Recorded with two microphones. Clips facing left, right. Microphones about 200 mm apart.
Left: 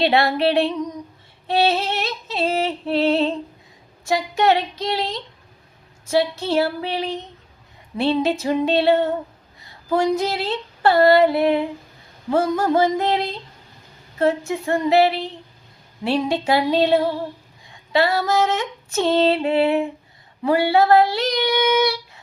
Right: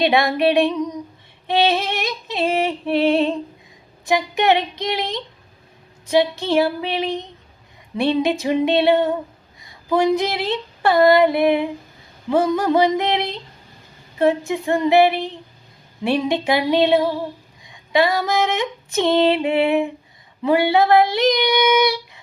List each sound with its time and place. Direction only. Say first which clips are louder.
0.0 s female singing: right 1 dB; 15° right (ahead or behind)
9.6 s a sound: right 2 dB; 15° right (ahead or behind)
10.2 s female singing: right 1 dB; 20° right (ahead or behind)
12.3 s child singing: right 1 dB; 20° right (ahead or behind)
14.2 s female singing: right 2 dB; 20° right (ahead or behind)
20.5 s child singing: even; 20° right (ahead or behind)